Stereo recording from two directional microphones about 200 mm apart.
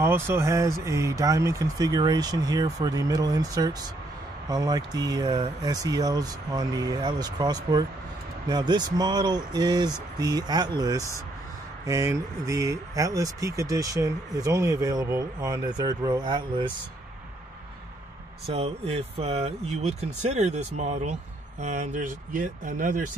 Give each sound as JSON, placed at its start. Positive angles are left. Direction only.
{"t": 0.0, "sound": "speech", "side_deg": -10}
{"t": 18.5, "sound": "speech", "side_deg": -30}